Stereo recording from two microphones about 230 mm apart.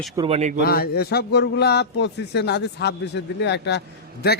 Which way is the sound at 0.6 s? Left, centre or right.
Left.